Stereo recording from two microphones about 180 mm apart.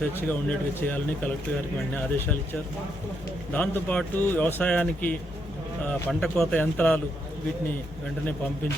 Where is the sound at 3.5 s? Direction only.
10° left (ahead or behind).